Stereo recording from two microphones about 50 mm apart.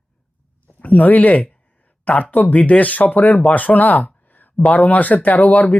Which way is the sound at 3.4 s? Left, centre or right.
Left.